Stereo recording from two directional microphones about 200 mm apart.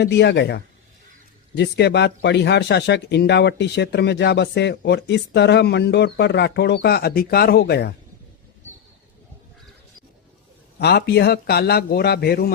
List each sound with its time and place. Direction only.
0.0 s speech: 55° left (ahead or behind)
10.8 s a man's voice: 55° left (ahead or behind)